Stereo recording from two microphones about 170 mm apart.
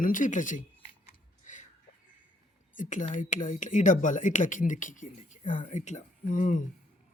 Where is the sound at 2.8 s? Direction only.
50° left (ahead or behind).